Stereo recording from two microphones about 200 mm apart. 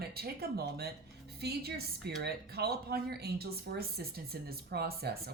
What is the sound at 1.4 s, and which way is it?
Speech, 55° right (ahead or behind).